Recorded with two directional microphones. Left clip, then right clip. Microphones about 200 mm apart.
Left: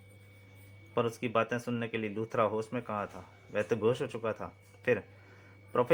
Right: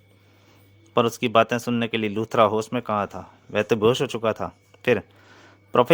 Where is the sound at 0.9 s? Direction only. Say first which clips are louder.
Right 11 dB; 55° right (ahead or behind).